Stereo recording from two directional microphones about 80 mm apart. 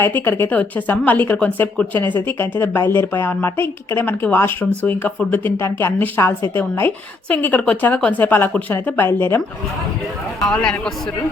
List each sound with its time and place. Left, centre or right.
0.0 s a woman's voice: left
7.3 s a woman's voice: centre
10.4 s speech: centre